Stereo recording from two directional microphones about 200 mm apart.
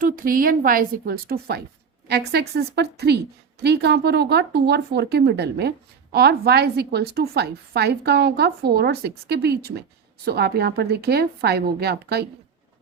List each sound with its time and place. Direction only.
0.0 s speech: 45° right (ahead or behind)